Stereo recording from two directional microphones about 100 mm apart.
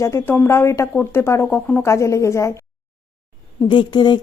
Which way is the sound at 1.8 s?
30° left (ahead or behind).